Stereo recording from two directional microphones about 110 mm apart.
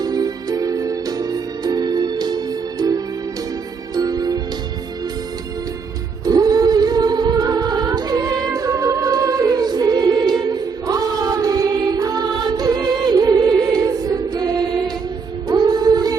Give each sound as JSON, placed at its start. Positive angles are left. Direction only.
{"t": 0.0, "sound": "music", "side_deg": -35}
{"t": 6.2, "sound": "music", "side_deg": -35}